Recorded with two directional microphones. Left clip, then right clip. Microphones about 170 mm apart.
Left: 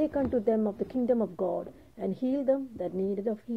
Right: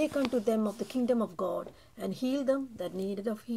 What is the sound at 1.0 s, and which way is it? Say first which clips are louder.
Speech: left 2 dB; 20° left (ahead or behind).